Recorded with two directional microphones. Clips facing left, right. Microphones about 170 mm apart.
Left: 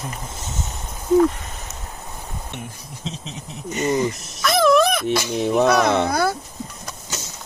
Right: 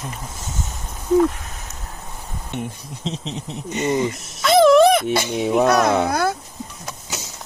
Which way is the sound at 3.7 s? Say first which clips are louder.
Even; 25° right (ahead or behind).